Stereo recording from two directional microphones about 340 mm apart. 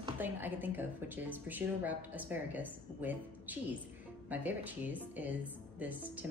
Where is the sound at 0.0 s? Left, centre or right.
Centre.